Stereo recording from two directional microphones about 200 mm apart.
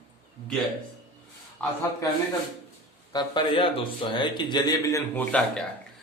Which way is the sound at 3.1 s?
20° left (ahead or behind).